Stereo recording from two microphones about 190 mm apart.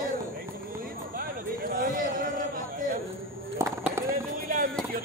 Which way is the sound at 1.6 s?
50° right (ahead or behind).